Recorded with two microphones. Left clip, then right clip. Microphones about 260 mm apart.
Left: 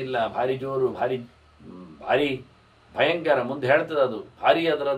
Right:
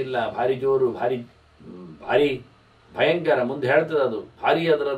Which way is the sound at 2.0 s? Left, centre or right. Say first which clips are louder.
Right 3 dB; centre.